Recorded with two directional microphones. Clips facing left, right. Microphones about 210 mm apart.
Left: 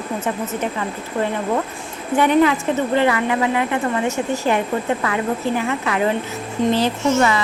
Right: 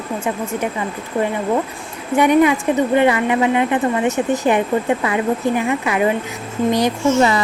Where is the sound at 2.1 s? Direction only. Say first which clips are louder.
Right 2 dB; 15° right (ahead or behind).